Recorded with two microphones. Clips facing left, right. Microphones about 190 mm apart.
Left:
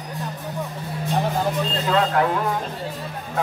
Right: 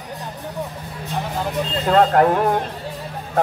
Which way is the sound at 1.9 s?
50° right (ahead or behind).